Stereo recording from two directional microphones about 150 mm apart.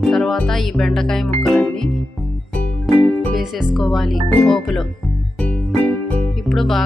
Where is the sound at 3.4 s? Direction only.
Centre (ahead or behind).